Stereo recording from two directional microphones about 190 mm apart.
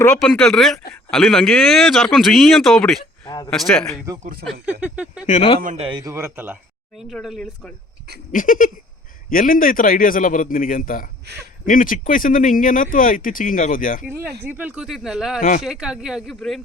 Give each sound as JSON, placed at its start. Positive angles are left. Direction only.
{"t": 0.2, "sound": "speech", "side_deg": 5}
{"t": 4.2, "sound": "speech", "side_deg": -50}
{"t": 4.6, "sound": "speech", "side_deg": -10}
{"t": 5.2, "sound": "speech", "side_deg": 40}
{"t": 5.5, "sound": "speech", "side_deg": -45}
{"t": 5.8, "sound": "speech", "side_deg": -20}
{"t": 8.3, "sound": "speech", "side_deg": 45}
{"t": 14.0, "sound": "speech", "side_deg": -10}
{"t": 15.4, "sound": "speech", "side_deg": 45}
{"t": 15.6, "sound": "speech", "side_deg": -5}